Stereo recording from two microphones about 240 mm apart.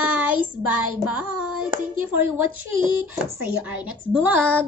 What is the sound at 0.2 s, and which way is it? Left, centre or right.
Child singing, centre.